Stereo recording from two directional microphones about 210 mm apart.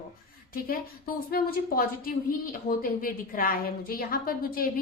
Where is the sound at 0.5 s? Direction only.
45° left (ahead or behind).